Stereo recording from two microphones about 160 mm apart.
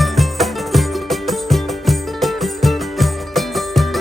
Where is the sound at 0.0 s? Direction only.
Centre (ahead or behind).